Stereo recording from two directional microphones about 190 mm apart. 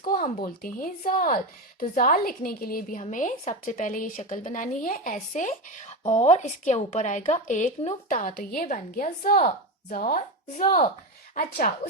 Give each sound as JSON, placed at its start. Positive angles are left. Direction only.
{"t": 0.0, "sound": "a woman's voice", "side_deg": 50}
{"t": 10.6, "sound": "a woman's voice", "side_deg": 45}